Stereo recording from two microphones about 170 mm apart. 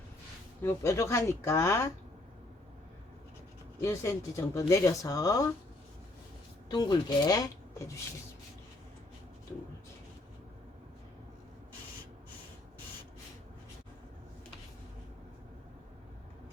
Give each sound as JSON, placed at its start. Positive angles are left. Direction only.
{"t": 0.6, "sound": "speech", "side_deg": 15}
{"t": 3.8, "sound": "speech", "side_deg": 15}
{"t": 6.7, "sound": "speech", "side_deg": 25}
{"t": 9.5, "sound": "speech", "side_deg": 10}